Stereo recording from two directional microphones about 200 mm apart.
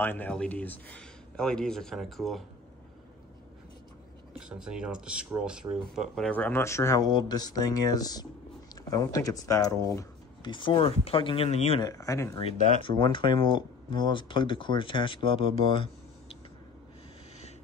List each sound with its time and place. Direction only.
0.0 s speech: 10° left (ahead or behind)
4.3 s speech: 5° right (ahead or behind); by 11.8 s 30° left (ahead or behind)
11.8 s speech: 15° left (ahead or behind)